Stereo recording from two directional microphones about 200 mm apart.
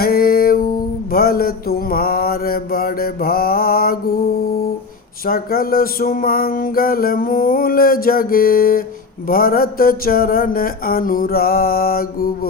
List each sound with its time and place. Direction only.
0.0 s music: 50° left (ahead or behind)
5.2 s music: 45° left (ahead or behind)